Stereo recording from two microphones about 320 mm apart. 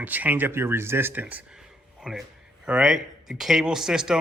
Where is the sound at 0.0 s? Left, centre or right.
Centre.